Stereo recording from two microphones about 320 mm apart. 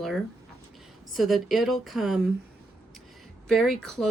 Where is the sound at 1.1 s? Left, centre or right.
Centre.